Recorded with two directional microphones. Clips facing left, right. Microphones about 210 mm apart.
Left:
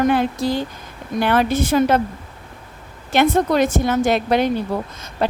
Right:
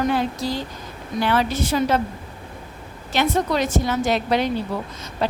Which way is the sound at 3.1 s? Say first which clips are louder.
Left 5 dB; 55° left (ahead or behind).